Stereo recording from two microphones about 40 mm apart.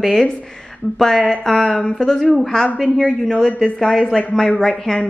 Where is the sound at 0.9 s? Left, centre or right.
Centre.